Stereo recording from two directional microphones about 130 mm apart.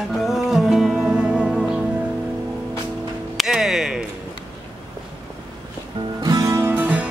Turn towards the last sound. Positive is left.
turn(degrees=-15)  # may be behind; listen again after turning